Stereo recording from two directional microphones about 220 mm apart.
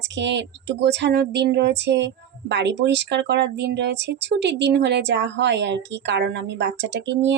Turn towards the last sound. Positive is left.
turn(degrees=-55)  # may be behind; listen again after turning